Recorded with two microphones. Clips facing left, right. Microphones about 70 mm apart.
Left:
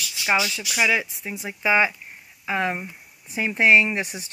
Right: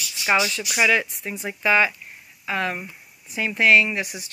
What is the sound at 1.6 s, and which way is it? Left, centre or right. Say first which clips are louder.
Speech: right 1 dB; centre.